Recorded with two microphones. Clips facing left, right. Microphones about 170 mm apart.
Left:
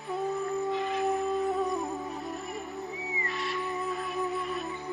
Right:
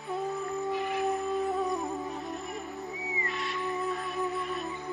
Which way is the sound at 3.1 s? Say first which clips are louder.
Even; centre (ahead or behind).